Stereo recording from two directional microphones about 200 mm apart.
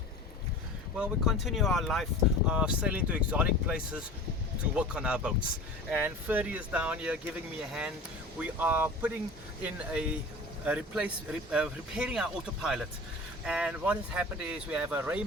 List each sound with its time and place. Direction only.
0.9 s speech: 5° right (ahead or behind)